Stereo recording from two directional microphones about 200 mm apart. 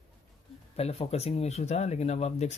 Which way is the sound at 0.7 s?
30° left (ahead or behind).